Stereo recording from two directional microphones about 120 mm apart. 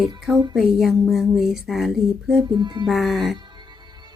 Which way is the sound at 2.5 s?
40° right (ahead or behind).